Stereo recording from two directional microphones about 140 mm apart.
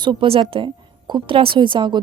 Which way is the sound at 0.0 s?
35° right (ahead or behind).